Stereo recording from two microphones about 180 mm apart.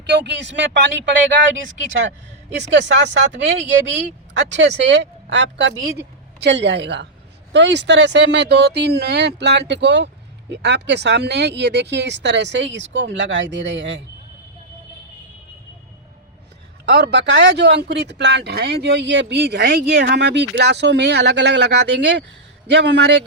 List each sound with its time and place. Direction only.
0.0 s speech: 70° right (ahead or behind); by 1.1 s 85° right
2.7 s speech: 80° right
16.9 s speech: 70° right (ahead or behind)